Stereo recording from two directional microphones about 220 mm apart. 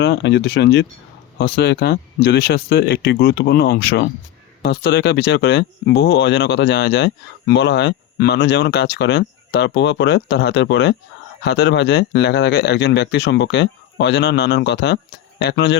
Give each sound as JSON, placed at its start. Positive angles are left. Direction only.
{"t": 0.0, "sound": "speech", "side_deg": 50}